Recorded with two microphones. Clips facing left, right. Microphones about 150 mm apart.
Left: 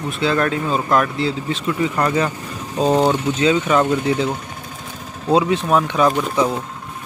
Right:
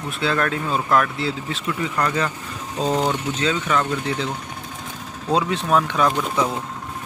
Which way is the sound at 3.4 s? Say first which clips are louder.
Left 6 dB; 15° left (ahead or behind).